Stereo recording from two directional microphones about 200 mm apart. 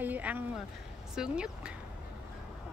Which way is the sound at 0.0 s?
10° right (ahead or behind).